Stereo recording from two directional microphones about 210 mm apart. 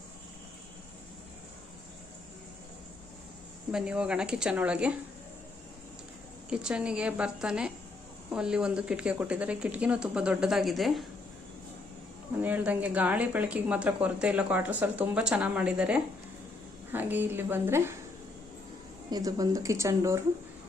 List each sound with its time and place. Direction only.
3.7 s speech: 5° right (ahead or behind)
6.5 s speech: 5° right (ahead or behind)
12.4 s speech: 10° right (ahead or behind)
19.1 s speech: 15° right (ahead or behind)